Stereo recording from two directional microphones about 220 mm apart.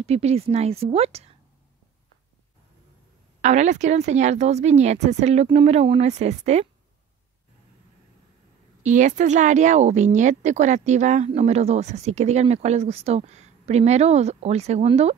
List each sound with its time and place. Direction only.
0.0 s a woman's voice: 30° right (ahead or behind)
3.3 s a woman's voice: 30° right (ahead or behind)
8.8 s a woman's voice: 35° right (ahead or behind)